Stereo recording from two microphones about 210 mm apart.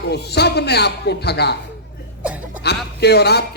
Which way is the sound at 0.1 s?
50° left (ahead or behind).